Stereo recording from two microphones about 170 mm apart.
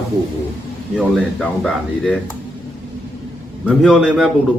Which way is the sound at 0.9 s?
Centre (ahead or behind).